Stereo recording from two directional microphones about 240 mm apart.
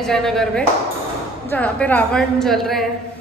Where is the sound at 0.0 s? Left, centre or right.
Centre.